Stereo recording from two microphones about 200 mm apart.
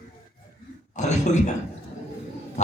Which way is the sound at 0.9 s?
35° left (ahead or behind).